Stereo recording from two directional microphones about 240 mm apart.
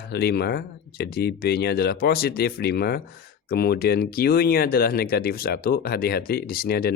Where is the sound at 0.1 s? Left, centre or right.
Left.